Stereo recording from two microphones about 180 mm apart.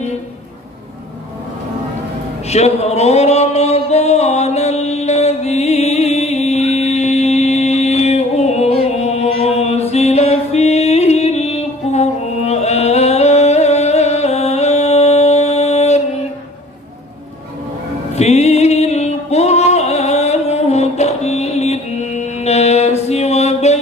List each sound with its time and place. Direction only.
2.5 s music: 35° left (ahead or behind)
18.1 s music: 35° left (ahead or behind)